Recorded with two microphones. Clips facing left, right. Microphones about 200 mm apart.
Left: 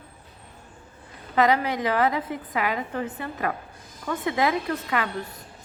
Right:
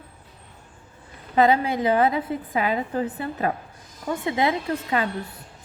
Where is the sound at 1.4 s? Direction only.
25° right (ahead or behind).